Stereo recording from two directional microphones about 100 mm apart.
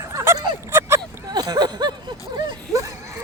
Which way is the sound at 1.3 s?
45° right (ahead or behind).